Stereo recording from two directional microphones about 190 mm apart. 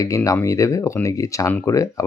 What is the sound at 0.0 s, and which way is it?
Speech, 15° left (ahead or behind).